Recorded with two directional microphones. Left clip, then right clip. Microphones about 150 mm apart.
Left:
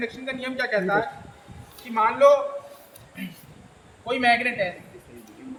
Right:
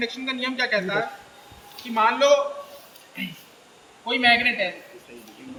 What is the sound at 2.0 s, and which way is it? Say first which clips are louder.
Speech: left 2 dB; 35° left (ahead or behind).